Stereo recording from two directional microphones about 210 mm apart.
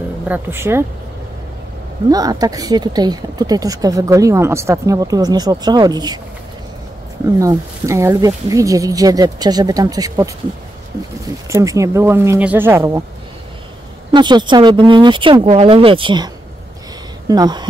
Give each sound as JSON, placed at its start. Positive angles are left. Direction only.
{"t": 0.3, "sound": "speech", "side_deg": -10}
{"t": 2.0, "sound": "speech", "side_deg": -20}
{"t": 7.3, "sound": "speech", "side_deg": -15}
{"t": 11.5, "sound": "speech", "side_deg": -15}
{"t": 14.1, "sound": "speech", "side_deg": -20}
{"t": 17.3, "sound": "speech", "side_deg": -20}